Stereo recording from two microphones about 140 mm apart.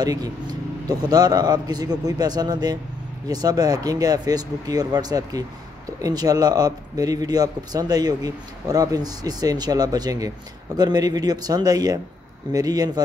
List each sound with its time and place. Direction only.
0.0 s a man's voice: 30° right (ahead or behind)